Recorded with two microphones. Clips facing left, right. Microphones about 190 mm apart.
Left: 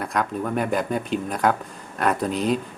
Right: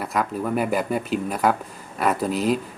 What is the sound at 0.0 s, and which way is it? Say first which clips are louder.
Speech: even; 5° right (ahead or behind).